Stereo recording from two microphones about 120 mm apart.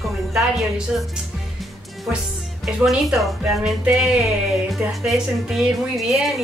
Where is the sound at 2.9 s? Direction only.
5° right (ahead or behind).